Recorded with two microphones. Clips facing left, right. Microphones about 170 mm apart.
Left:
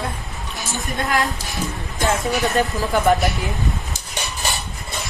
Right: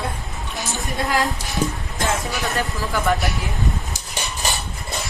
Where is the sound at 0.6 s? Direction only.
20° right (ahead or behind).